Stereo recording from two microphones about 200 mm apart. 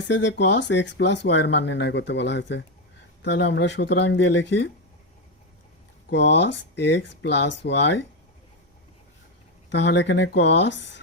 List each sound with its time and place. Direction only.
0.1 s speech: 65° left (ahead or behind)
6.1 s speech: 60° left (ahead or behind)
9.7 s speech: 60° left (ahead or behind)